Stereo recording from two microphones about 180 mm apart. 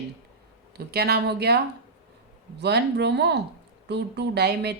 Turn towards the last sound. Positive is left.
turn(degrees=-65)  # may be behind; listen again after turning